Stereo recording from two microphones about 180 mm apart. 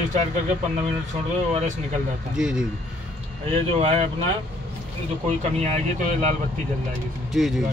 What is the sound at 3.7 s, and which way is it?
Speech, 30° right (ahead or behind).